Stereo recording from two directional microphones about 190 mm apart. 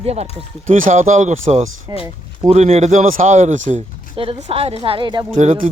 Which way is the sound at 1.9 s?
20° right (ahead or behind).